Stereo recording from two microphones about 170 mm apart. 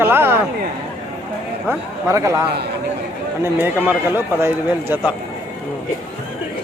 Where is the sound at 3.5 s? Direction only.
10° right (ahead or behind).